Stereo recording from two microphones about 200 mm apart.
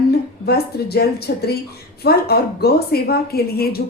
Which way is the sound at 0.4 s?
50° left (ahead or behind).